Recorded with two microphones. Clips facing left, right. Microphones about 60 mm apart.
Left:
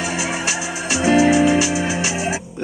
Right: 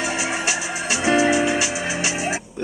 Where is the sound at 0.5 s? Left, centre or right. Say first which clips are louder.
Left 1 dB; right.